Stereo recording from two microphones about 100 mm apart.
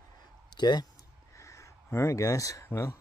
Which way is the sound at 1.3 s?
30° left (ahead or behind).